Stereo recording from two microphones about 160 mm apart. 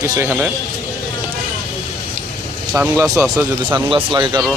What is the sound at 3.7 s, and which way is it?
Speech, 30° right (ahead or behind).